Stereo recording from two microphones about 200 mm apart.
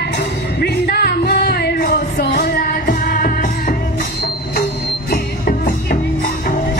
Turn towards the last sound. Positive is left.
turn(degrees=45)  # may be behind; listen again after turning